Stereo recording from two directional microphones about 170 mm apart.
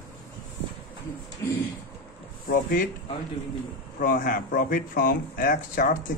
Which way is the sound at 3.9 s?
55° left (ahead or behind).